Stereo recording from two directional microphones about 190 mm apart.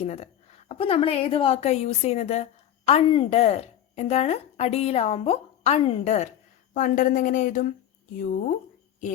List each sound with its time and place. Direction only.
0.0 s a woman's voice: 35° left (ahead or behind)